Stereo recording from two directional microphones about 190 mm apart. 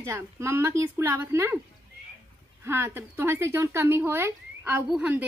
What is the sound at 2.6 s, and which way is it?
Speech, 15° right (ahead or behind).